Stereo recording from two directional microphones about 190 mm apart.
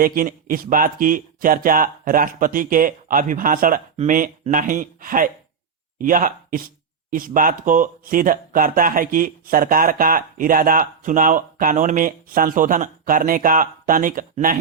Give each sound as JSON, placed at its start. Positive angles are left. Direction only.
{"t": 0.0, "sound": "speech", "side_deg": -50}